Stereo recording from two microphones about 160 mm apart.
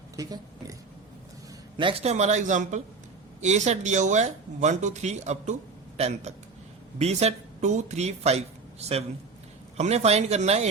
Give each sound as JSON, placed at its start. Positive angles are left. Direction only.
{"t": 0.2, "sound": "speech", "side_deg": -20}
{"t": 1.7, "sound": "speech", "side_deg": -35}